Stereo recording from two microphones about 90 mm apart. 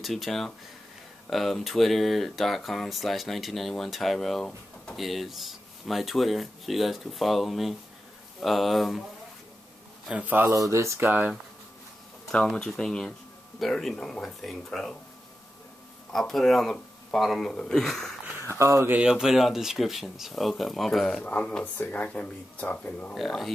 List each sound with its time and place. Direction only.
0.0 s speech: centre (ahead or behind)
10.1 s speech: 20° right (ahead or behind)
10.5 s speech: 35° right (ahead or behind)
11.0 s speech: 20° right (ahead or behind)
12.3 s speech: 10° left (ahead or behind)
16.1 s speech: 5° left (ahead or behind)
18.5 s speech: 30° right (ahead or behind)
18.9 s speech: 10° right (ahead or behind)
21.2 s speech: 15° left (ahead or behind)
23.1 s speech: centre (ahead or behind)